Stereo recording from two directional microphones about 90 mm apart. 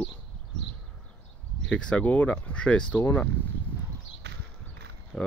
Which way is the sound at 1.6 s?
15° left (ahead or behind).